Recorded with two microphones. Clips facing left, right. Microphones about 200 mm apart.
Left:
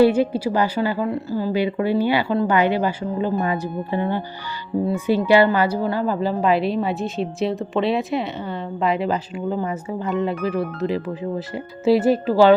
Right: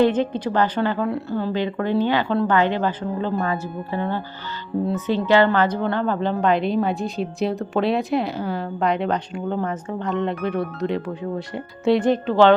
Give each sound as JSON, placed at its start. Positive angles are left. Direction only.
{"t": 0.0, "sound": "a woman's voice", "side_deg": 10}